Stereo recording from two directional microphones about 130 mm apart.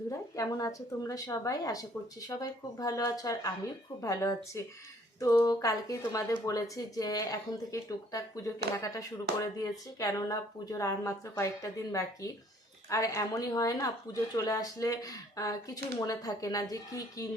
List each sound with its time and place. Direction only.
0.1 s a woman's voice: 25° left (ahead or behind)